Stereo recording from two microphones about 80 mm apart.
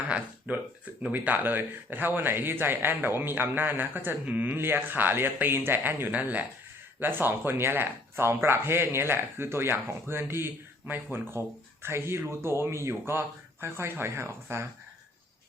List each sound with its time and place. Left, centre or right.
0.5 s a man's voice: centre